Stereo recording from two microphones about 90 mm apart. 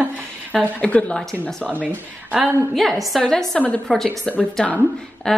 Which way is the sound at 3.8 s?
Centre (ahead or behind).